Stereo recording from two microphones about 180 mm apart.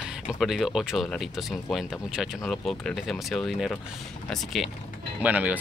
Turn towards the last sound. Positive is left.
turn(degrees=-10)  # may be behind; listen again after turning